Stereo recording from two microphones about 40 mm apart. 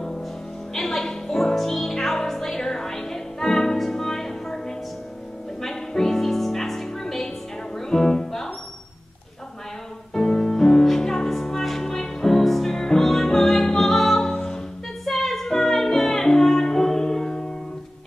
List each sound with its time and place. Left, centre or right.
0.7 s music: centre
10.1 s music: centre
14.3 s music: centre
15.0 s music: centre